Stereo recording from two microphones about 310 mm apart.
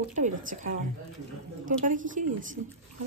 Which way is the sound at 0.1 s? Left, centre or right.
Right.